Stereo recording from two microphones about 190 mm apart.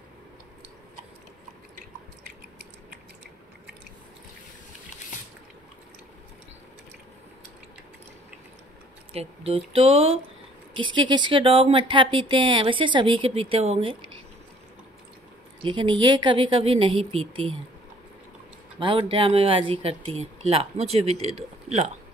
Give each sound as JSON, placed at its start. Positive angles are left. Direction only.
{"t": 9.1, "sound": "speech", "side_deg": -30}
{"t": 15.6, "sound": "speech", "side_deg": -25}
{"t": 18.8, "sound": "speech", "side_deg": -25}